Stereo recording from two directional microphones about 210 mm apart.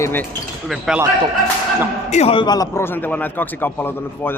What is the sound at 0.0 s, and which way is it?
Speech, 10° left (ahead or behind).